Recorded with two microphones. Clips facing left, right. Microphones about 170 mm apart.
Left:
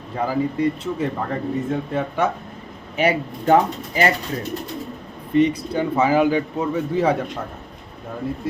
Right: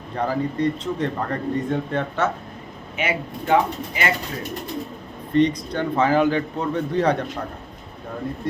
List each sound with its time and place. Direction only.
0.2 s speech: 10° left (ahead or behind)
3.0 s speech: 40° left (ahead or behind)
5.3 s speech: 10° left (ahead or behind)